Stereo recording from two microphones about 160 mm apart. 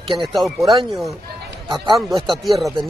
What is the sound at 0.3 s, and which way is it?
Speech, centre (ahead or behind).